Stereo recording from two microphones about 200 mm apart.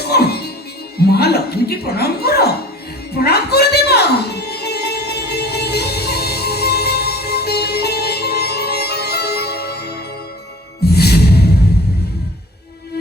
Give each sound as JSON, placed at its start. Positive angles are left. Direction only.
{"t": 0.0, "sound": "music", "side_deg": 55}
{"t": 0.9, "sound": "speech", "side_deg": 55}
{"t": 3.2, "sound": "music", "side_deg": 55}